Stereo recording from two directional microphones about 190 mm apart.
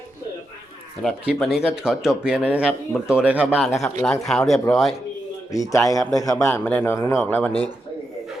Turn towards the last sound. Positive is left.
turn(degrees=10)  # may be behind; listen again after turning